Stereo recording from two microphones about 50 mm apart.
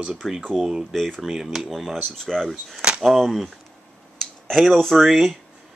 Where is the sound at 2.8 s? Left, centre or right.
Centre.